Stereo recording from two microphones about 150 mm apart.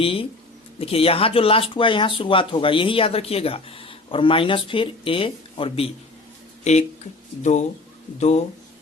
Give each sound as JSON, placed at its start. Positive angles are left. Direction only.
{"t": 0.0, "sound": "speech", "side_deg": 40}
{"t": 6.7, "sound": "speech", "side_deg": 50}